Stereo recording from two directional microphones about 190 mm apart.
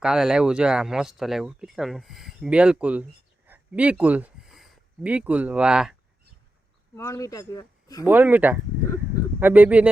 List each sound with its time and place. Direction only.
0.0 s speech: centre (ahead or behind)
6.9 s speech: 15° left (ahead or behind)
8.0 s speech: 10° right (ahead or behind)